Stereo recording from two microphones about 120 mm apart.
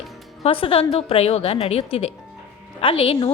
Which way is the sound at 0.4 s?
50° left (ahead or behind).